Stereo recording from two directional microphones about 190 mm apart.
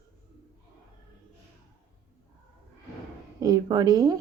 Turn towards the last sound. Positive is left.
turn(degrees=-20)  # may be behind; listen again after turning